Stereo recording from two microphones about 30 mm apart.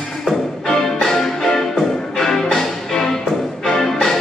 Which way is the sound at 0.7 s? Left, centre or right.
Centre.